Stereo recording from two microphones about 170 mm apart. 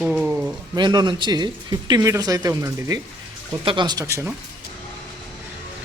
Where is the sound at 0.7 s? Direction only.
25° right (ahead or behind).